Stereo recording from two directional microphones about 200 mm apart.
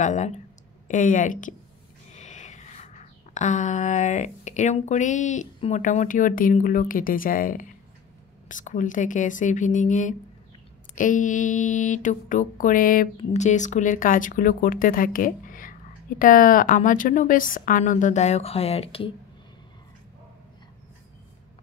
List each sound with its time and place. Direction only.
0.0 s a woman's voice: 35° left (ahead or behind)
2.1 s a sound: 35° left (ahead or behind)
8.5 s a woman's voice: 40° left (ahead or behind)